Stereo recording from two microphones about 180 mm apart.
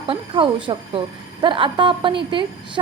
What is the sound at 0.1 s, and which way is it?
A woman's voice, 30° right (ahead or behind).